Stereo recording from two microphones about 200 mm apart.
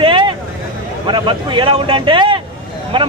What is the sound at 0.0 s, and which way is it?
Vehicle, 25° right (ahead or behind).